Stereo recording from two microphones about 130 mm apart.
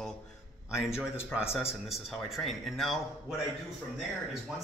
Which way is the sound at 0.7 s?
20° left (ahead or behind).